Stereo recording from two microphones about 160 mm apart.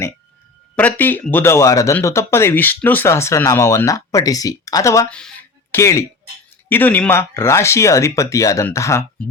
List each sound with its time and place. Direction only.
0.8 s speech: 10° left (ahead or behind)
5.0 s speech: 5° left (ahead or behind)